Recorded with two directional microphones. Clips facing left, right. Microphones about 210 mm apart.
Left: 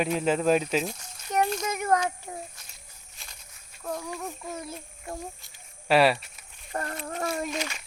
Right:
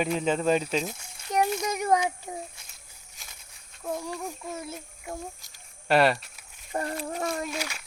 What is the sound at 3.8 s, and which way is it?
Speech, 10° right (ahead or behind).